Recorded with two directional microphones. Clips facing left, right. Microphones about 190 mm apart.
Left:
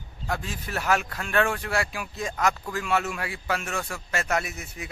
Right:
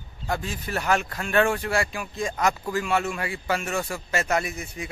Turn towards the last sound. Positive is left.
turn(degrees=5)  # may be behind; listen again after turning